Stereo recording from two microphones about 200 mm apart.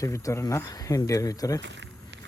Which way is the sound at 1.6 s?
60° right (ahead or behind).